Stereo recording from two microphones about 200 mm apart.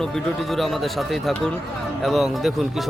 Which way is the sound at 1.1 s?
Centre (ahead or behind).